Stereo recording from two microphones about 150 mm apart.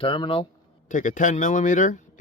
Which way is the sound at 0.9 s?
60° left (ahead or behind).